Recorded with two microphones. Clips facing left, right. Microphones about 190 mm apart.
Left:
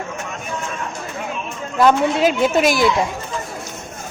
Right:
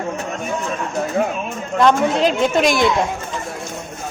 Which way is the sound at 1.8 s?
5° left (ahead or behind).